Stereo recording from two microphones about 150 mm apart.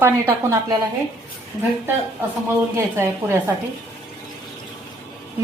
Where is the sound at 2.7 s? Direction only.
15° right (ahead or behind).